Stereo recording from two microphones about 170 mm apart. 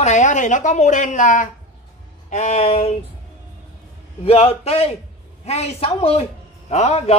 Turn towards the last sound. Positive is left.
turn(degrees=40)  # may be behind; listen again after turning